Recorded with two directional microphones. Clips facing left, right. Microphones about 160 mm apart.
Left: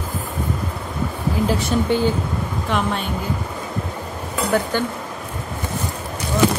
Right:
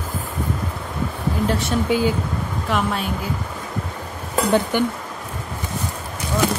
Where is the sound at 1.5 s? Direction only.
Centre (ahead or behind).